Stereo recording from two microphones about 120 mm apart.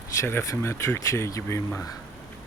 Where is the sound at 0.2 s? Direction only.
20° left (ahead or behind).